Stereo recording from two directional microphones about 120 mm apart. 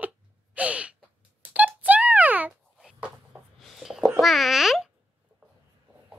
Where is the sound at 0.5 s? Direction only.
10° right (ahead or behind).